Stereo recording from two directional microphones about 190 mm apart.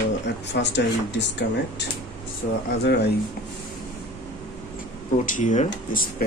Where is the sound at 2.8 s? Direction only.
60° left (ahead or behind).